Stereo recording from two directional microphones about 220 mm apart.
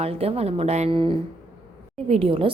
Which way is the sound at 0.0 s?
25° right (ahead or behind).